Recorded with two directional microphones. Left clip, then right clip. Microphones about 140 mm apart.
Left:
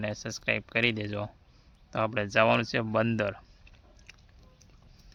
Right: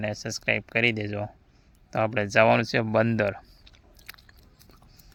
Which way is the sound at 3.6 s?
50° right (ahead or behind).